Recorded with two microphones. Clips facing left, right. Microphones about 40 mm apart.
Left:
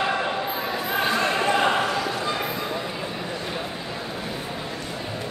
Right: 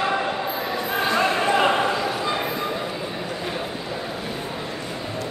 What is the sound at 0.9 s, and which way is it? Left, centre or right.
Basketball bounce, centre.